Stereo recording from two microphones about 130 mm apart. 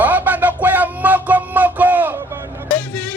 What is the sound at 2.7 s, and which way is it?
Hubbub, 10° left (ahead or behind).